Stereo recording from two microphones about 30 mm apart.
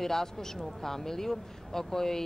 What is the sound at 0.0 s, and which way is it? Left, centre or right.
Speech, centre.